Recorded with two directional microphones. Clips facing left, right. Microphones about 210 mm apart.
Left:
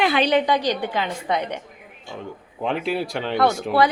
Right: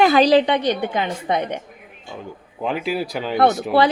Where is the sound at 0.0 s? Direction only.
40° right (ahead or behind); by 1.5 s 20° right (ahead or behind).